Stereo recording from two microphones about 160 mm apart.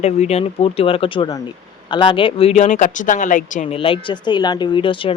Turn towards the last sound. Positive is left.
turn(degrees=30)  # may be behind; listen again after turning